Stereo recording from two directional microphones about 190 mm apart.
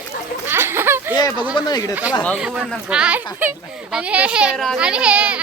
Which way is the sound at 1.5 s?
20° left (ahead or behind).